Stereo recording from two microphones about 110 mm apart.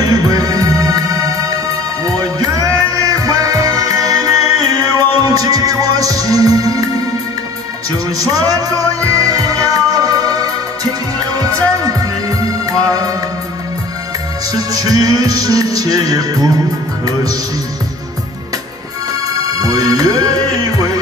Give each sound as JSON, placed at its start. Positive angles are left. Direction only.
{"t": 0.0, "sound": "music", "side_deg": -35}
{"t": 8.2, "sound": "music", "side_deg": -35}
{"t": 14.5, "sound": "music", "side_deg": -35}
{"t": 19.4, "sound": "music", "side_deg": -35}